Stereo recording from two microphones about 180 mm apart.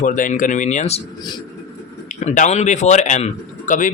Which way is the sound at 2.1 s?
40° left (ahead or behind).